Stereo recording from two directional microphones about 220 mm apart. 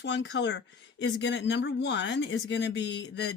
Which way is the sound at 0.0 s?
55° left (ahead or behind).